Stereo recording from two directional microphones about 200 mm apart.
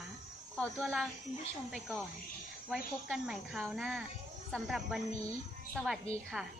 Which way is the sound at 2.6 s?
Centre (ahead or behind).